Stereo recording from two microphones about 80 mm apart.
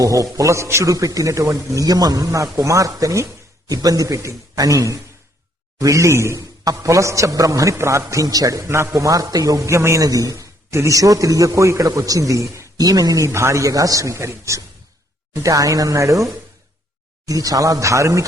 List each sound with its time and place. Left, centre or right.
0.0 s a man's voice: right
17.2 s a man's voice: right